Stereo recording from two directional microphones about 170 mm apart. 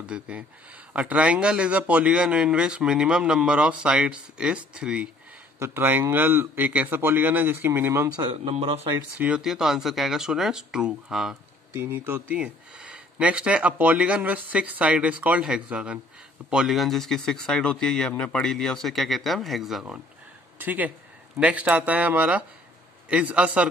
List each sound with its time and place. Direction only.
0.0 s speech: 5° right (ahead or behind)
8.2 s speech: 30° right (ahead or behind)
9.2 s speech: 5° right (ahead or behind)